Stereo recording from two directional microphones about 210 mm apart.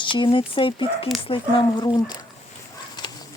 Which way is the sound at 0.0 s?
25° left (ahead or behind).